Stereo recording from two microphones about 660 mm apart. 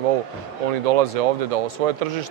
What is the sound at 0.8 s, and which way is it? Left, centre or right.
Speech, right.